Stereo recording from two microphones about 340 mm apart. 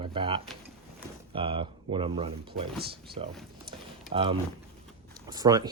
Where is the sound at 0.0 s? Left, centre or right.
Centre.